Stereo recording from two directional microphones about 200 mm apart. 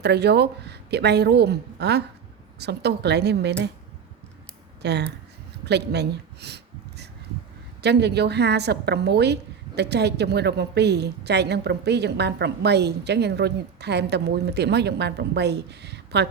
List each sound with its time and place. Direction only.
0.0 s a woman's voice: 55° right (ahead or behind)
4.8 s speech: 55° right (ahead or behind)
5.6 s a sound: 55° right (ahead or behind)
7.8 s a woman's voice: 55° right (ahead or behind)